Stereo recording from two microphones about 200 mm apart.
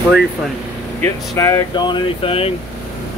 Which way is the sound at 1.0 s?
15° left (ahead or behind).